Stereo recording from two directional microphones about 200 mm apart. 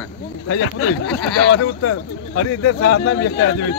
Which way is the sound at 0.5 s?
60° left (ahead or behind).